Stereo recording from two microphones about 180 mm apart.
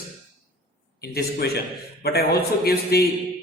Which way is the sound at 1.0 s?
60° left (ahead or behind).